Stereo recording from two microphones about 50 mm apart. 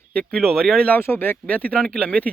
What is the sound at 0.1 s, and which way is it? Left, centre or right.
Speech, left.